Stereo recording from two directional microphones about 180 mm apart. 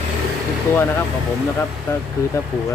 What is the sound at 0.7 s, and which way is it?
Speech, 15° left (ahead or behind).